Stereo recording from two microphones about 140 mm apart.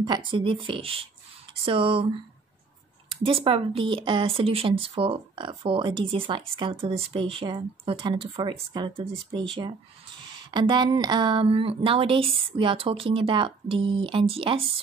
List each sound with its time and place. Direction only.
0.0 s speech: 35° right (ahead or behind)
10.2 s speech: 35° right (ahead or behind)